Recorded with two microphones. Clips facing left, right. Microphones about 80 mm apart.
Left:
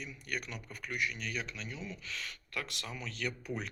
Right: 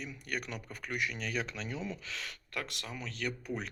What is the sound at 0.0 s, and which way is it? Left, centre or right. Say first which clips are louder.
Speech: right 2 dB; right.